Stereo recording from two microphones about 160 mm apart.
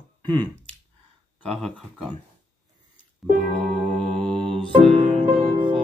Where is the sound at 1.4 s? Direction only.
5° left (ahead or behind).